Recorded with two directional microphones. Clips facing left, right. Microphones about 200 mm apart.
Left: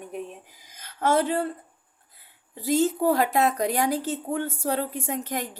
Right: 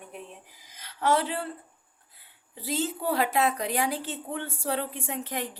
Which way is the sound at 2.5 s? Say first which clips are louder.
Left 8 dB; 45° left (ahead or behind).